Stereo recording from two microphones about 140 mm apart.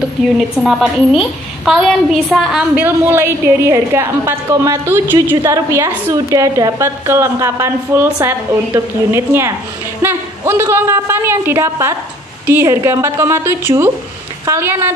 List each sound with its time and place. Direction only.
0.6 s a woman's voice: centre (ahead or behind)
2.8 s a woman's voice: 15° right (ahead or behind)